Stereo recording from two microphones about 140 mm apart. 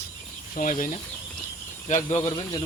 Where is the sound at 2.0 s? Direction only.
40° left (ahead or behind).